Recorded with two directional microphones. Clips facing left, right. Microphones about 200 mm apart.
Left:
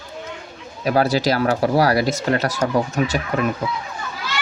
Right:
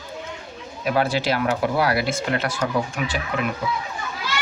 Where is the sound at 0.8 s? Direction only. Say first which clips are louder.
Left 4 dB; 40° left (ahead or behind).